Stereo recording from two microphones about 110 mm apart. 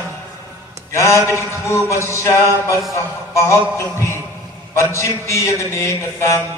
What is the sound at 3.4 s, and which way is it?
A man's voice, 25° left (ahead or behind).